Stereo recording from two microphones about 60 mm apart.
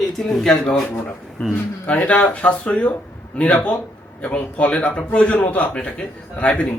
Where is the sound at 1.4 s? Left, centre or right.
Left.